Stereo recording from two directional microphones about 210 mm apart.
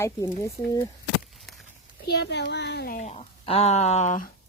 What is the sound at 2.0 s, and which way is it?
Speech, 55° left (ahead or behind).